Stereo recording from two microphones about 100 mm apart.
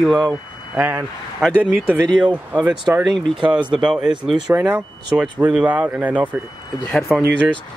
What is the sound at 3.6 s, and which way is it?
Speech, 50° right (ahead or behind).